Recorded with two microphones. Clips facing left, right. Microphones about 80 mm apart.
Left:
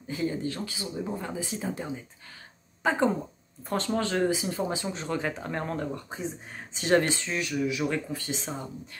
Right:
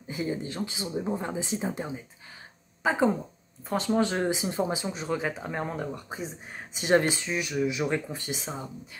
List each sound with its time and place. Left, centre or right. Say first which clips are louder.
0.1 s speech: left 1 dB; centre
2.8 s speech: right 1 dB; centre
4.8 s speech: right 1 dB; centre
8.4 s speech: even; centre